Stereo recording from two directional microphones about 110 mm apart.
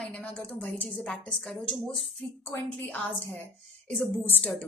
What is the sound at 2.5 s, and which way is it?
Speech, 15° left (ahead or behind).